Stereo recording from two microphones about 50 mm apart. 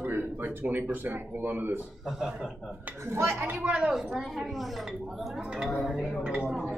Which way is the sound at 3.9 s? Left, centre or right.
Centre.